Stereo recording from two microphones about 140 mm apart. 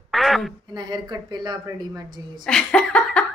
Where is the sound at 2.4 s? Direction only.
5° left (ahead or behind).